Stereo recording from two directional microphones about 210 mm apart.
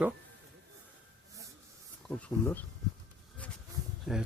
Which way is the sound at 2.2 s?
10° left (ahead or behind).